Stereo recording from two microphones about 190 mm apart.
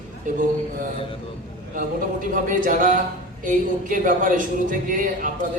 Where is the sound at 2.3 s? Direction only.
45° right (ahead or behind).